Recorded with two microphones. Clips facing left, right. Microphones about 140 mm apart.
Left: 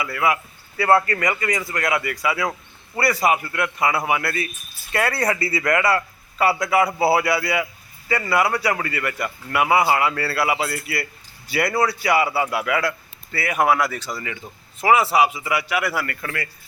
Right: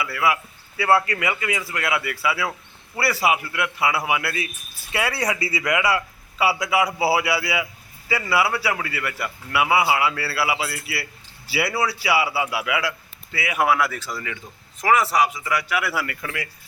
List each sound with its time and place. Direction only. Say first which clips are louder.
0.0 s a man's voice: left 1 dB; 5° right (ahead or behind)
15.2 s a man's voice: left 2 dB; 25° left (ahead or behind)
15.7 s a man's voice: left 1 dB; 5° right (ahead or behind)